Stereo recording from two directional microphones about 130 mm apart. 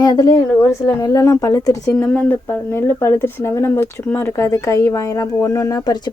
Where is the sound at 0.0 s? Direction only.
30° left (ahead or behind).